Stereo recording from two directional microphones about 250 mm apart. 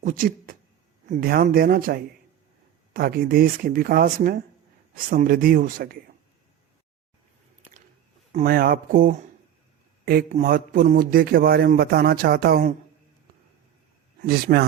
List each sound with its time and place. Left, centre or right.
0.0 s a man's voice: right
8.3 s a man's voice: right
14.2 s a man's voice: right